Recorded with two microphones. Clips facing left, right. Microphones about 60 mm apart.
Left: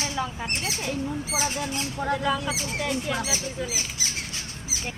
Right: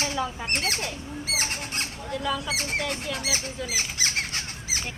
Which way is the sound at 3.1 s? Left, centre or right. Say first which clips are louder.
Left 4 dB; centre.